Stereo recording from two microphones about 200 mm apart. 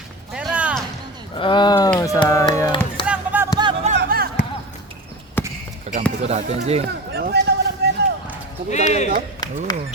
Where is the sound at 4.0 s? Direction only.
50° right (ahead or behind).